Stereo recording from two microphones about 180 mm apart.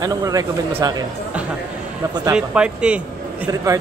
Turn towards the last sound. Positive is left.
turn(degrees=-20)  # may be behind; listen again after turning